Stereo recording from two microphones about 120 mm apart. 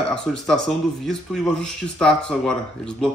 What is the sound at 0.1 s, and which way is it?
Speech, 5° left (ahead or behind).